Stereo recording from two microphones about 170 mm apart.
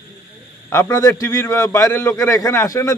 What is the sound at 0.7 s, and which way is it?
A man's voice, 20° left (ahead or behind).